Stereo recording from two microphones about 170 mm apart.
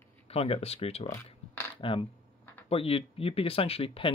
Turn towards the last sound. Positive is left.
turn(degrees=35)  # may be behind; listen again after turning